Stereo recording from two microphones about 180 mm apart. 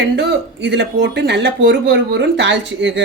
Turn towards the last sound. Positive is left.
turn(degrees=-90)